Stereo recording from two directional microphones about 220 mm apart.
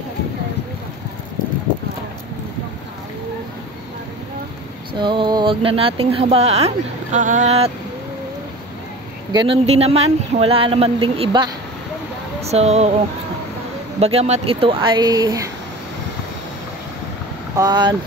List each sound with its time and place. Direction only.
4.9 s speech: 20° right (ahead or behind)
9.3 s speech: 20° right (ahead or behind)
13.9 s speech: 30° right (ahead or behind)
17.6 s speech: 20° right (ahead or behind)